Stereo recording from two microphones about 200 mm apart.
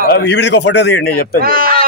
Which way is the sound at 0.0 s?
55° left (ahead or behind).